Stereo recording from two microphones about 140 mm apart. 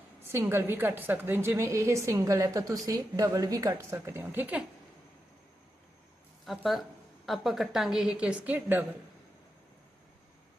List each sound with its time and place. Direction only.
0.3 s a woman's voice: 20° right (ahead or behind)
6.4 s a woman's voice: centre (ahead or behind)